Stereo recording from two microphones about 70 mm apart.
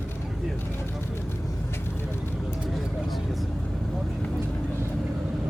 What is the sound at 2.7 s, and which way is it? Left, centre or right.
Vehicle, centre.